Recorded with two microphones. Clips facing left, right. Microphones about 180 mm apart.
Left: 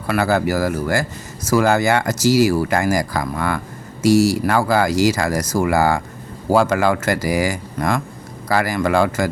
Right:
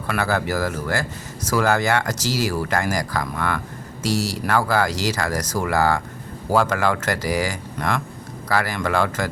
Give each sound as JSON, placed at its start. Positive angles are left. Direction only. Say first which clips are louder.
{"t": 0.1, "sound": "speech", "louder": "left 5 dB", "side_deg": 10}